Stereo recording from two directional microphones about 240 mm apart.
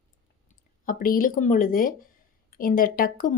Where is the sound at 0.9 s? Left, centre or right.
Left.